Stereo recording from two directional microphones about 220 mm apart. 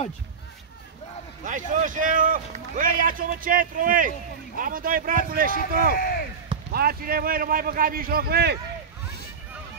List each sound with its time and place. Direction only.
1.4 s speech: 35° right (ahead or behind)
5.9 s speech: 40° left (ahead or behind)
6.7 s speech: 45° right (ahead or behind)